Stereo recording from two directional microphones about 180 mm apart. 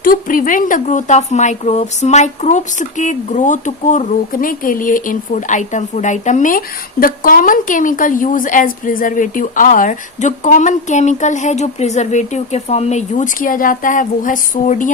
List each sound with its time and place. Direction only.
0.0 s speech: 50° left (ahead or behind)